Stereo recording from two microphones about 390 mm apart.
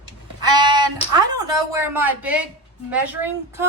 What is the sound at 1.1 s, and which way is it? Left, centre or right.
A woman's voice, centre.